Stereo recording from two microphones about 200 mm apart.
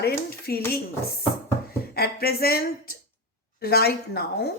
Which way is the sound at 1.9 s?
50° left (ahead or behind).